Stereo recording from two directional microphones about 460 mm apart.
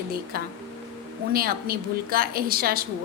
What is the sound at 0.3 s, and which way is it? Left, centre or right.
A woman's voice, centre.